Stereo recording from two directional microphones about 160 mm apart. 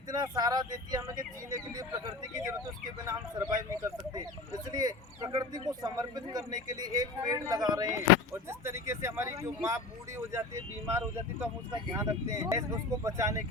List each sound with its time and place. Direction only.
0.1 s a man's voice: 25° right (ahead or behind)